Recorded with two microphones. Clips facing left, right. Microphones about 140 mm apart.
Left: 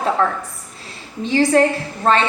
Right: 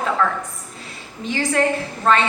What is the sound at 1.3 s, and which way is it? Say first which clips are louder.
Speech: left 5 dB; 30° left (ahead or behind).